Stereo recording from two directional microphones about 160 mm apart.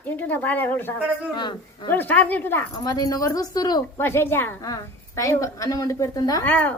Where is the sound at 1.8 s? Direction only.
10° left (ahead or behind).